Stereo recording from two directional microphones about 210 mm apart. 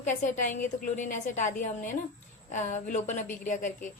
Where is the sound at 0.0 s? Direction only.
35° left (ahead or behind).